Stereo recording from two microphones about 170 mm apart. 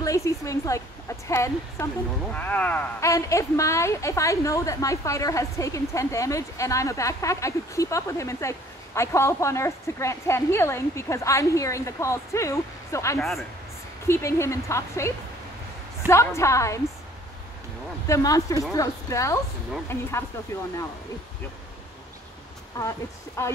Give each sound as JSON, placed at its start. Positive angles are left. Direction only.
{"t": 0.0, "sound": "a woman's voice", "side_deg": 20}
{"t": 13.2, "sound": "speech", "side_deg": 0}
{"t": 14.0, "sound": "speech", "side_deg": 15}
{"t": 16.3, "sound": "speech", "side_deg": 15}
{"t": 18.0, "sound": "a woman's voice", "side_deg": 20}
{"t": 22.8, "sound": "speech", "side_deg": 20}